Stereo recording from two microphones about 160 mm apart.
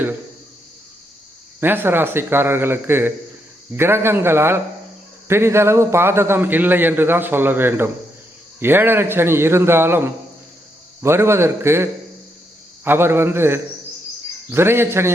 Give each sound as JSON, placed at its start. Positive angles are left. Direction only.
{"t": 1.6, "sound": "a man's voice", "side_deg": -15}